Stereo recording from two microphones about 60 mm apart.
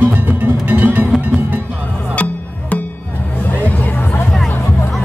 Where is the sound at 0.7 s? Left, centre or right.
Right.